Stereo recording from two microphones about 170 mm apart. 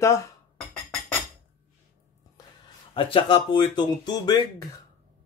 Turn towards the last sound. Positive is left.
turn(degrees=25)  # may be behind; listen again after turning